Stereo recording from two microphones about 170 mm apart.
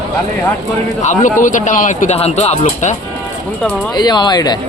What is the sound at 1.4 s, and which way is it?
Speech, 50° left (ahead or behind).